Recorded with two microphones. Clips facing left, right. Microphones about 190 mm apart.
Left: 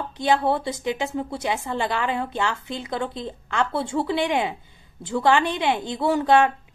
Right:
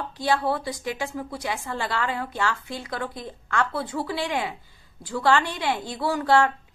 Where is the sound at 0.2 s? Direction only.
20° left (ahead or behind).